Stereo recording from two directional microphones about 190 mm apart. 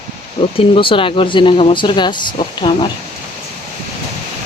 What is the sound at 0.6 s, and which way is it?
Speech, 25° left (ahead or behind).